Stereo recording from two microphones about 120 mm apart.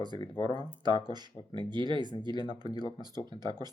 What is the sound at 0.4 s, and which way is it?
Speech, 40° right (ahead or behind).